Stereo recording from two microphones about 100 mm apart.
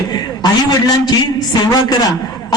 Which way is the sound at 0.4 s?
40° left (ahead or behind).